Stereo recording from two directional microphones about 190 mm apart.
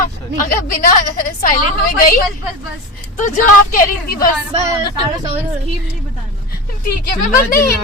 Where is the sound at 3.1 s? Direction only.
40° left (ahead or behind).